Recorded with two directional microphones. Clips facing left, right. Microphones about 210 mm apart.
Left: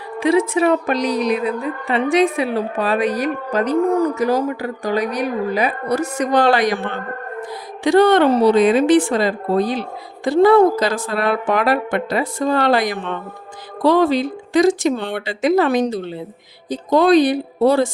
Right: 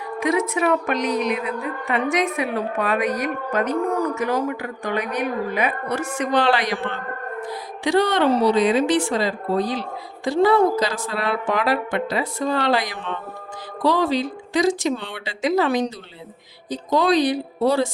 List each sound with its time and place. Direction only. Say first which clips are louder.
0.2 s a woman's voice: left 5 dB; 30° left (ahead or behind); by 17.8 s 55° left (ahead or behind)